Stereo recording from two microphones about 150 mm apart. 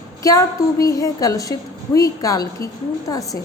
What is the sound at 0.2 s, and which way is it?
Speech, 20° left (ahead or behind).